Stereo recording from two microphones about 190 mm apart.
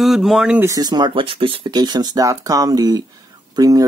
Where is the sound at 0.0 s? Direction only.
Centre (ahead or behind).